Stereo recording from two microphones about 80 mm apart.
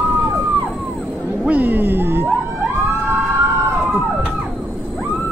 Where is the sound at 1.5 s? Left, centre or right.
Right.